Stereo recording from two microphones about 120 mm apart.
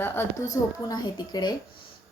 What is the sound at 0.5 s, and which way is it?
A woman's voice, 35° left (ahead or behind).